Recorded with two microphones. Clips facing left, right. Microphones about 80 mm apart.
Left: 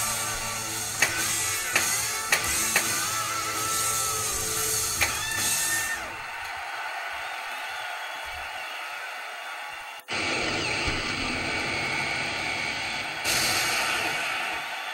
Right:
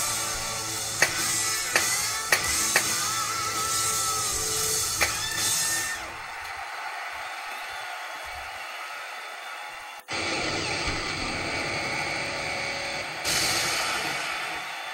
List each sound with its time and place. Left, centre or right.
0.0 s music: centre
10.1 s vehicle: centre
13.2 s a sound: centre